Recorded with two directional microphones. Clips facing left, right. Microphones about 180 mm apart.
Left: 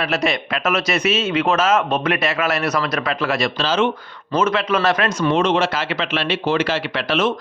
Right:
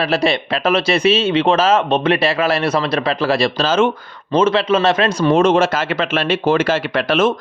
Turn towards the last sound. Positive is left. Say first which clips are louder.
# right 4 dB
turn(degrees=-50)  # may be behind; listen again after turning